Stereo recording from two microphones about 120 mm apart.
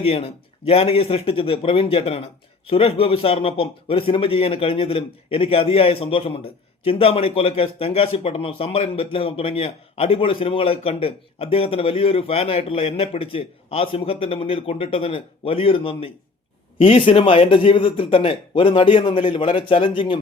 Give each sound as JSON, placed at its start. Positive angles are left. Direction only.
{"t": 0.0, "sound": "speech", "side_deg": 55}